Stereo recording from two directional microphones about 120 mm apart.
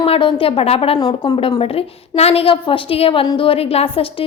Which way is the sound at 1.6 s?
55° left (ahead or behind).